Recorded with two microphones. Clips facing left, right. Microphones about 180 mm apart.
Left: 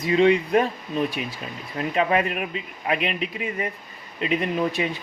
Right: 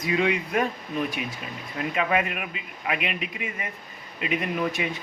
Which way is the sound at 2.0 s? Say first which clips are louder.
Left 4 dB; 35° left (ahead or behind).